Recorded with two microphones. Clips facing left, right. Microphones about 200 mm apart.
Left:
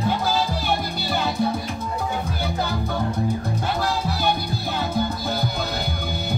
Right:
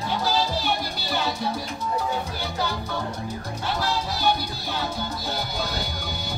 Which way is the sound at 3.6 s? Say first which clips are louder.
Even; 50° left (ahead or behind).